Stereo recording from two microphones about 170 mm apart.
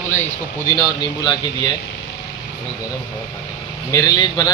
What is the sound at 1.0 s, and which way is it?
Speech, 25° left (ahead or behind).